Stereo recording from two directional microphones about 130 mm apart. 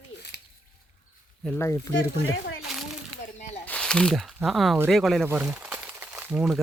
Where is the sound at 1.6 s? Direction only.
20° left (ahead or behind).